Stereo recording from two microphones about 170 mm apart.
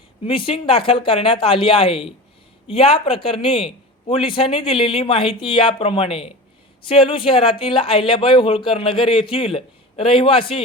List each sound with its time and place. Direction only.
0.3 s a man's voice: 30° left (ahead or behind)